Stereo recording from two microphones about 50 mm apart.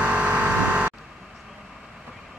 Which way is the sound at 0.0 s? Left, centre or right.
Right.